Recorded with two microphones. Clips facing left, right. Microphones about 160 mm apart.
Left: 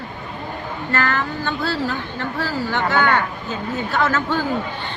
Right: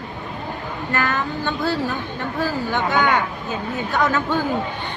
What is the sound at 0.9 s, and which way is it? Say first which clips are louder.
A woman's voice: left 1 dB; 20° right (ahead or behind).